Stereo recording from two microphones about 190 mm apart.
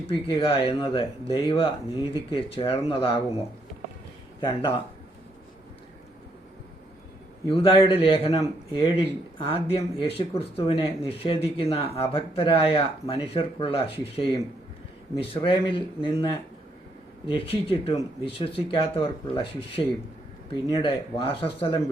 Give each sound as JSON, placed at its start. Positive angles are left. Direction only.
{"t": 0.1, "sound": "speech", "side_deg": 30}
{"t": 7.4, "sound": "speech", "side_deg": 30}
{"t": 15.4, "sound": "speech", "side_deg": 25}